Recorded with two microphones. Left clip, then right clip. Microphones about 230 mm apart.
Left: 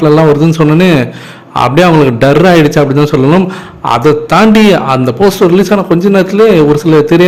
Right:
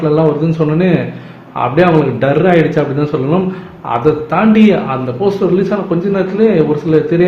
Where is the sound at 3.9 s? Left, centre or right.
Left.